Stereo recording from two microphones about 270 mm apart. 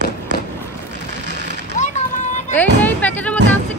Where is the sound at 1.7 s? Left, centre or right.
Left.